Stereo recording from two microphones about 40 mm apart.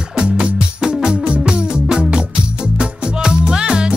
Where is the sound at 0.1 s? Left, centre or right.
Right.